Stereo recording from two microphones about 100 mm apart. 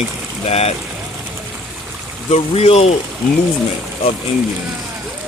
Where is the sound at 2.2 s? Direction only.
90° left.